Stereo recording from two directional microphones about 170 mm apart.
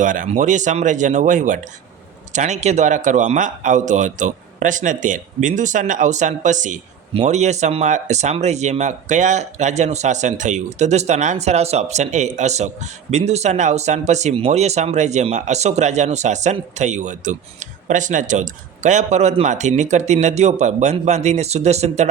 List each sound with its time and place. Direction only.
0.0 s a man's voice: 50° right (ahead or behind)